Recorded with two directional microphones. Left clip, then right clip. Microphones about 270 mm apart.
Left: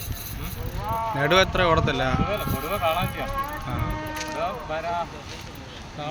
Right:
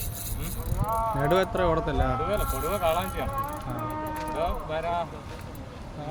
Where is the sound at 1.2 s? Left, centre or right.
Centre.